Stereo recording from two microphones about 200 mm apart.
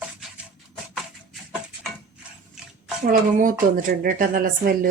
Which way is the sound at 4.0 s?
45° right (ahead or behind).